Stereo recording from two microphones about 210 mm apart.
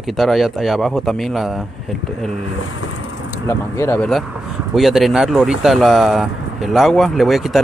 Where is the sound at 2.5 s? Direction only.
75° left (ahead or behind).